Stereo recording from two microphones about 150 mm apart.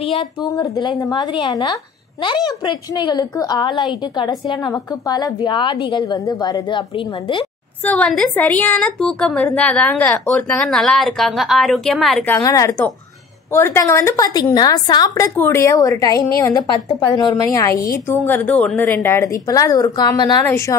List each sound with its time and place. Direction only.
0.0 s a woman's voice: 35° left (ahead or behind)
7.8 s a woman's voice: 10° left (ahead or behind)
12.3 s a woman's voice: 20° left (ahead or behind); by 19.0 s 5° left (ahead or behind)
19.0 s a woman's voice: 20° left (ahead or behind)